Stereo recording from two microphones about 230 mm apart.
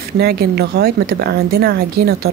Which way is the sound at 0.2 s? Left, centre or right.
Right.